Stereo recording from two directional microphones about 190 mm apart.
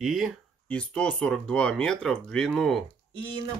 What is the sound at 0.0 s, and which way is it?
Speech, centre (ahead or behind).